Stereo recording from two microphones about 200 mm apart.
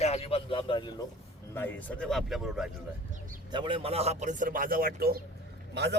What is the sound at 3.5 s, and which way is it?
A man's voice, 25° right (ahead or behind).